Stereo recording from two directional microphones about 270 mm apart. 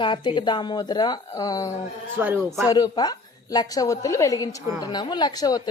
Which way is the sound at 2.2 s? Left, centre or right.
Centre.